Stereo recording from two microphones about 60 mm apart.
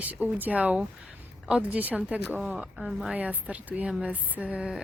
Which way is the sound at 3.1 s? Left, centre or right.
Right.